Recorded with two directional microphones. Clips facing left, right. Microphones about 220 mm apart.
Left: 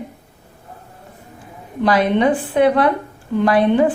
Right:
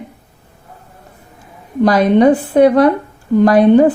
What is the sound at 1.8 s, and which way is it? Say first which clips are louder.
A woman's voice: right 6 dB; 40° right (ahead or behind).